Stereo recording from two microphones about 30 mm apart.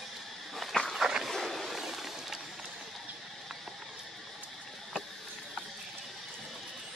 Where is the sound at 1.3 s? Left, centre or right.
Centre.